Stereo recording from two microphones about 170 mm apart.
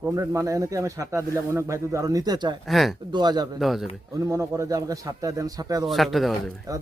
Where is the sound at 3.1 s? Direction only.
25° right (ahead or behind).